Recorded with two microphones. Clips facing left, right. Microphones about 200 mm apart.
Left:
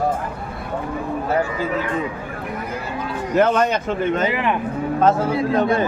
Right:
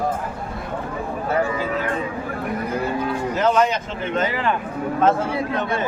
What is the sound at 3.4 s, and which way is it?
Speech, 55° left (ahead or behind).